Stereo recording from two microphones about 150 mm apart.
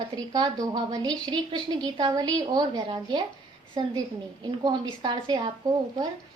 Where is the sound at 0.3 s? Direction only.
25° right (ahead or behind).